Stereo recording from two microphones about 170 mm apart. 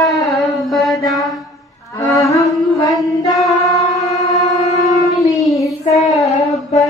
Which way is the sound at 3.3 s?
Centre (ahead or behind).